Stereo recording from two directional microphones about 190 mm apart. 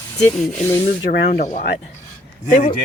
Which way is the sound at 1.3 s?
40° left (ahead or behind).